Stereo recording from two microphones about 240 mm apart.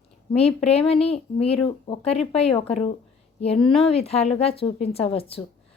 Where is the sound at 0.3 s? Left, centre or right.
Left.